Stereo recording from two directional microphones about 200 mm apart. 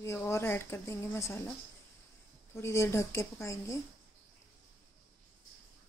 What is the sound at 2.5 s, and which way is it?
Speech, 15° left (ahead or behind).